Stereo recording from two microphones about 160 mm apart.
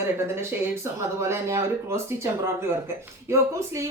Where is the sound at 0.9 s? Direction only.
15° right (ahead or behind).